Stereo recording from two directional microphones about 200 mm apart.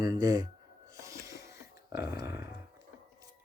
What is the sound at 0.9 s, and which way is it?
Wheeze, 15° right (ahead or behind).